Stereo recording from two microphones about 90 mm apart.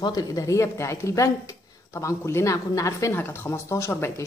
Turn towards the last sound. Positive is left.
turn(degrees=30)  # may be behind; listen again after turning